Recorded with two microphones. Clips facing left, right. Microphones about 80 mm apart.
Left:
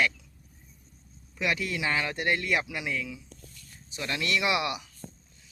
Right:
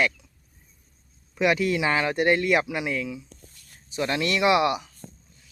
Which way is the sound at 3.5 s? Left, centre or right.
Right.